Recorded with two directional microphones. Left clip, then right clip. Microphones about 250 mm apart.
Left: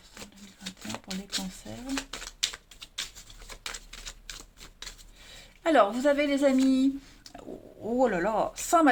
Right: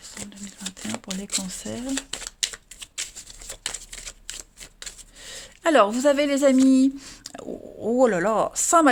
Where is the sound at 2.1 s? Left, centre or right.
Right.